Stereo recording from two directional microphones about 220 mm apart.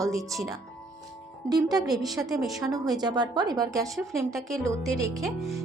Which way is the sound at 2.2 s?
Centre (ahead or behind).